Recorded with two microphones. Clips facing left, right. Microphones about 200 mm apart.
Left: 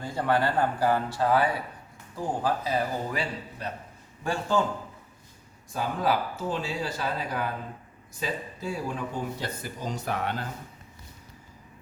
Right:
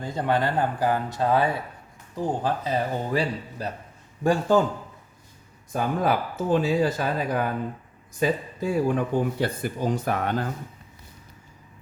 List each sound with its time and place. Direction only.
0.0 s speech: 20° right (ahead or behind)
4.2 s speech: 45° right (ahead or behind)
5.7 s speech: 50° right (ahead or behind)